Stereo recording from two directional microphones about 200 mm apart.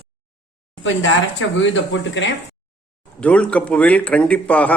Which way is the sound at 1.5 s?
70° left (ahead or behind).